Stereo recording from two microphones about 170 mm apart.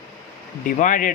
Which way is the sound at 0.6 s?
50° left (ahead or behind).